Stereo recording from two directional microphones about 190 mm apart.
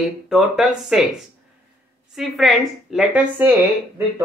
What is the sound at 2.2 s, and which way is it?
Speech, centre (ahead or behind).